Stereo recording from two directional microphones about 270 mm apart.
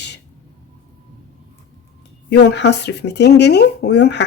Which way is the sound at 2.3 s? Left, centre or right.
Left.